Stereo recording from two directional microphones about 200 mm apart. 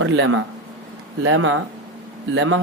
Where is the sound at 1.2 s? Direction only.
85° right.